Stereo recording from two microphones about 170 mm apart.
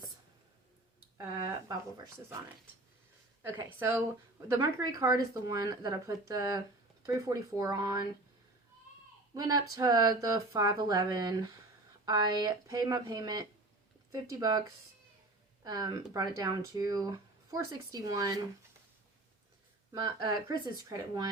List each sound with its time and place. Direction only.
3.4 s speech: 15° right (ahead or behind)
9.3 s speech: 25° right (ahead or behind)
15.6 s speech: 20° right (ahead or behind)
19.9 s speech: 25° right (ahead or behind)